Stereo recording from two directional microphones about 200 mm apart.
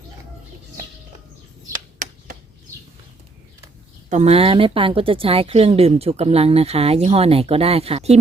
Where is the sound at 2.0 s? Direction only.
40° right (ahead or behind).